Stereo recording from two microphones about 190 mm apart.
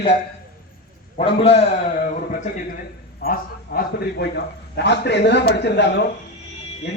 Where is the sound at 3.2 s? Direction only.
50° left (ahead or behind).